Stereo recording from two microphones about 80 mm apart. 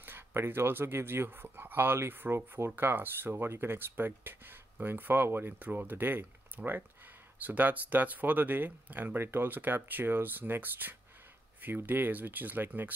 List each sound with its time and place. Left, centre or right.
0.0 s speech: right